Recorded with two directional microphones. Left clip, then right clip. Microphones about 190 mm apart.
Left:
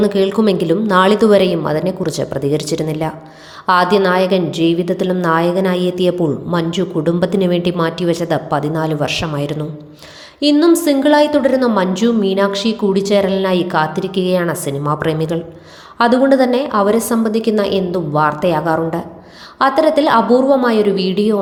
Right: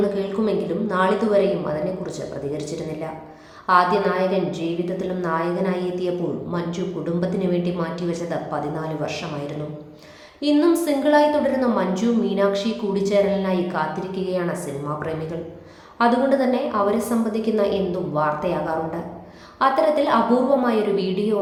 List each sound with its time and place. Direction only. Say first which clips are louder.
0.0 s a woman's voice: left 8 dB; 50° left (ahead or behind)